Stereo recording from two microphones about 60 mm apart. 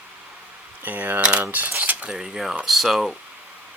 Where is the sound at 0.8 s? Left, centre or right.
Right.